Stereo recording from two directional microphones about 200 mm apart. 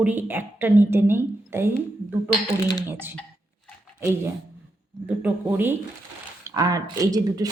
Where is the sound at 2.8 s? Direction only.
10° right (ahead or behind).